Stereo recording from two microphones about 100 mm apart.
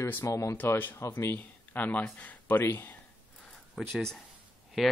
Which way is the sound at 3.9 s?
5° left (ahead or behind).